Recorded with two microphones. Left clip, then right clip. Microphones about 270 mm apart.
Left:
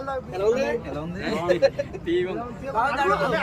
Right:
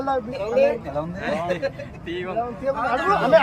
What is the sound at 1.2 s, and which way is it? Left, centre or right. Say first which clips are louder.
Speech: left 5 dB; centre.